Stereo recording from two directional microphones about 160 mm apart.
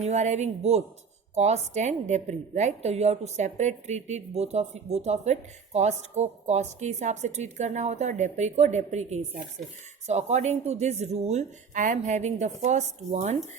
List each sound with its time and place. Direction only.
0.0 s a woman's voice: 45° right (ahead or behind)